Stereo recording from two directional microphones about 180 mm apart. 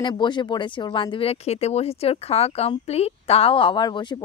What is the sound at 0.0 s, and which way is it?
Speech, 25° left (ahead or behind).